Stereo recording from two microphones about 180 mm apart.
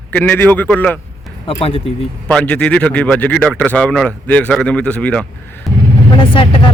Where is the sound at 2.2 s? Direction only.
5° left (ahead or behind).